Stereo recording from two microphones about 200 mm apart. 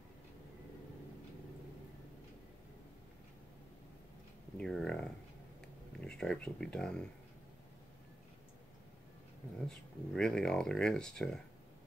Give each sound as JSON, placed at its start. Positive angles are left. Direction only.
{"t": 4.6, "sound": "speech", "side_deg": 5}
{"t": 9.7, "sound": "speech", "side_deg": 5}